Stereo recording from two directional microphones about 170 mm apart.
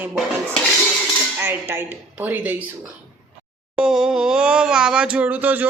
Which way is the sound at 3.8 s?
5° right (ahead or behind).